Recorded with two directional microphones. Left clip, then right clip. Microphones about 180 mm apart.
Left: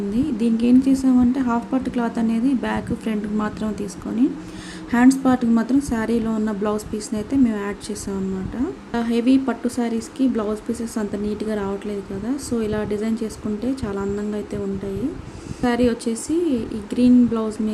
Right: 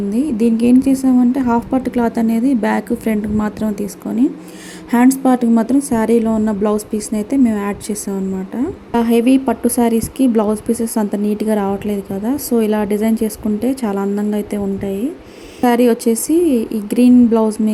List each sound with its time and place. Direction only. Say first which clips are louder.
0.1 s a woman's voice: right 6 dB; 25° right (ahead or behind)
15.6 s a woman's voice: right 8 dB; 30° right (ahead or behind)